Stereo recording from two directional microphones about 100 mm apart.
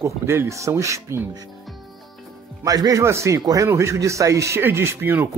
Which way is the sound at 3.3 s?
40° right (ahead or behind).